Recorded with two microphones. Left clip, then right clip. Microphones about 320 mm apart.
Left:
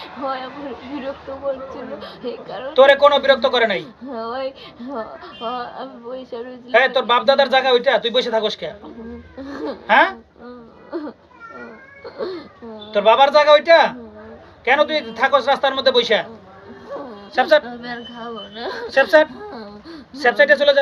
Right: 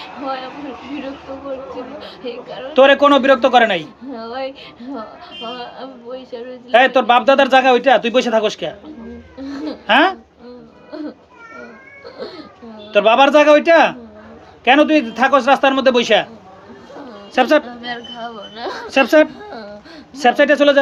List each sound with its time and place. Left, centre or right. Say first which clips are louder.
2.0 s speech: right 1 dB; centre
2.7 s speech: right 1 dB; right
4.1 s speech: even; centre
5.7 s speech: even; centre
6.7 s speech: right 4 dB; right
9.8 s speech: right 1 dB; right
12.9 s speech: right 2 dB; right
17.3 s speech: right 1 dB; right
18.2 s speech: right 2 dB; centre
18.9 s speech: right 1 dB; right